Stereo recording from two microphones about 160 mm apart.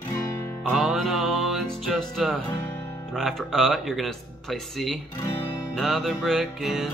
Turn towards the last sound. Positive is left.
turn(degrees=0)  # may be behind; listen again after turning